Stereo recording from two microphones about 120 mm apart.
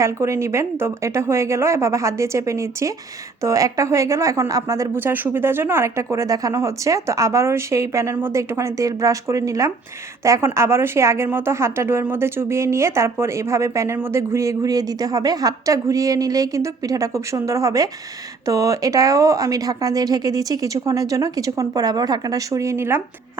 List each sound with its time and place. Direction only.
0.0 s speech: 25° right (ahead or behind)